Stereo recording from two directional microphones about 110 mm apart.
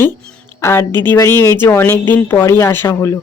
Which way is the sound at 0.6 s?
25° left (ahead or behind).